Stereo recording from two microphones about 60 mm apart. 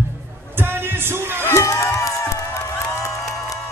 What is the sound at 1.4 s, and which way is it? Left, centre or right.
Crowd, left.